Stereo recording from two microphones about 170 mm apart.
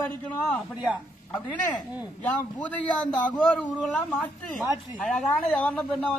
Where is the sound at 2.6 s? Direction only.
10° left (ahead or behind).